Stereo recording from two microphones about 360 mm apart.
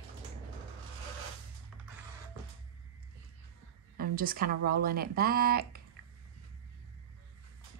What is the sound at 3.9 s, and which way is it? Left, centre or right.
Speech, right.